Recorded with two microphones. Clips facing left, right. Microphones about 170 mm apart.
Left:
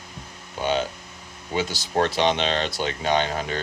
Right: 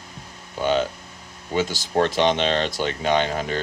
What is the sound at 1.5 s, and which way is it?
Speech, 45° right (ahead or behind).